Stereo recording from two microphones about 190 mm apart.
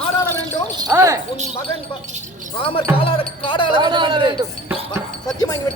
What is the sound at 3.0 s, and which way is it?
Music, 30° left (ahead or behind).